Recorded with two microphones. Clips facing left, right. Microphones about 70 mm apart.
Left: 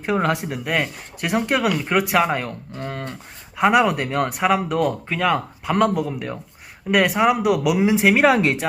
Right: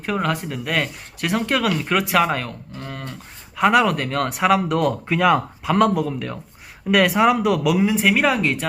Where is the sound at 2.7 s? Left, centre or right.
Left.